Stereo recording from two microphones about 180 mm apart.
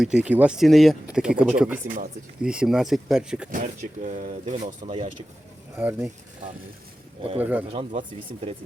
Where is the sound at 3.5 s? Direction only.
45° right (ahead or behind).